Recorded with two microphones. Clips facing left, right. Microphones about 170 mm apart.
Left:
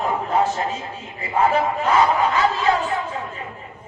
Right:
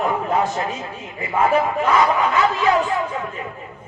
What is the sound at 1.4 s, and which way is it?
Speech, 30° left (ahead or behind).